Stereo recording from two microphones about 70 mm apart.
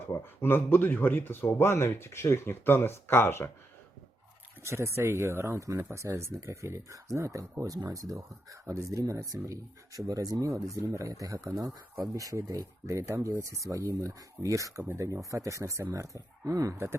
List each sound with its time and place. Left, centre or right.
0.4 s speech: left
4.6 s speech: right
5.5 s speech: right
16.7 s speech: right